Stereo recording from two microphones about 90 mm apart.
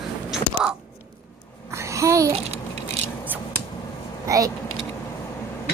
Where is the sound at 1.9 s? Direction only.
35° right (ahead or behind).